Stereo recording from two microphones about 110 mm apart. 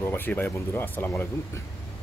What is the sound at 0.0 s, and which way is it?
Speech, 20° left (ahead or behind).